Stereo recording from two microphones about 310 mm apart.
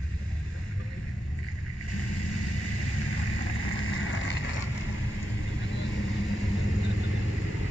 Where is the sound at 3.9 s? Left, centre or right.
Left.